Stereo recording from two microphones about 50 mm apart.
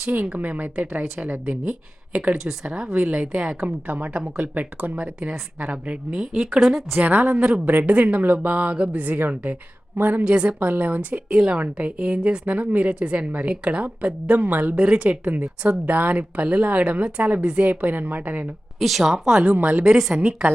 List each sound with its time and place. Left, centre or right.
0.0 s a woman's voice: right; by 3.6 s centre
3.6 s a woman's voice: right; by 6.7 s centre
6.9 s a woman's voice: right
9.0 s a woman's voice: right
10.2 s a woman's voice: right
10.6 s a woman's voice: right
11.3 s a woman's voice: centre; by 14.8 s right
14.8 s a woman's voice: right
18.8 s a woman's voice: centre
19.5 s a woman's voice: right
19.8 s a woman's voice: centre